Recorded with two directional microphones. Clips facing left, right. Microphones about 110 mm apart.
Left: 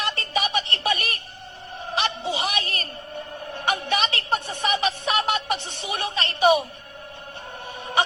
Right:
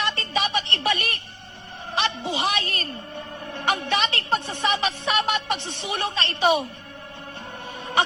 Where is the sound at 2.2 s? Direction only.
20° left (ahead or behind).